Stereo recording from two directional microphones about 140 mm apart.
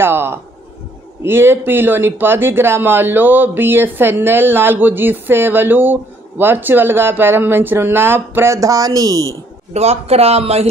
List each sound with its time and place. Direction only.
0.0 s speech: 15° right (ahead or behind)
9.8 s speech: 50° right (ahead or behind)